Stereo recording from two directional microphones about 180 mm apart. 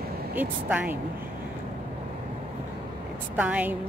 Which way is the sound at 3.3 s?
10° right (ahead or behind).